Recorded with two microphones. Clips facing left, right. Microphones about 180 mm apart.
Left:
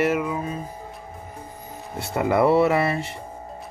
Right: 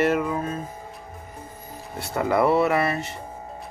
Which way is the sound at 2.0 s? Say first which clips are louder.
Left 1 dB; 25° left (ahead or behind).